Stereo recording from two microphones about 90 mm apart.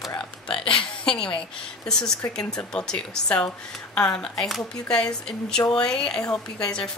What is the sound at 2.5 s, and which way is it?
A woman's voice, 10° left (ahead or behind).